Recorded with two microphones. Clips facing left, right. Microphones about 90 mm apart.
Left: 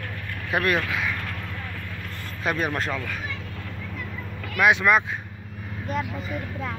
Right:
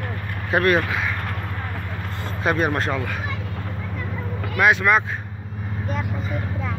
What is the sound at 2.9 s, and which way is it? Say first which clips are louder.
Speech: right 4 dB; 5° right (ahead or behind).